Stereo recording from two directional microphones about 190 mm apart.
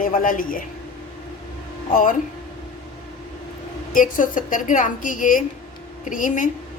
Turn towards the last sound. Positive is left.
turn(degrees=45)  # may be behind; listen again after turning